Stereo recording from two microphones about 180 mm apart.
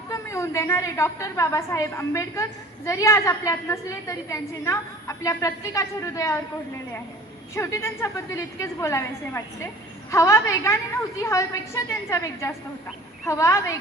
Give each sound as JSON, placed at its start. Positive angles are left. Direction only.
{"t": 0.1, "sound": "a woman's voice", "side_deg": 15}
{"t": 7.5, "sound": "a woman's voice", "side_deg": 15}